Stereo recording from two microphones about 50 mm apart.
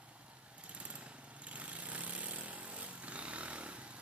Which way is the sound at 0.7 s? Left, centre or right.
Right.